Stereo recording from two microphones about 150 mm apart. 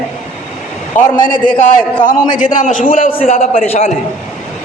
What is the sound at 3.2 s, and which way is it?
Speech, 45° left (ahead or behind).